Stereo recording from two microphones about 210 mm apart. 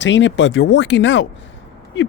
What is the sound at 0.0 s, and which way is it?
Speech, 60° left (ahead or behind).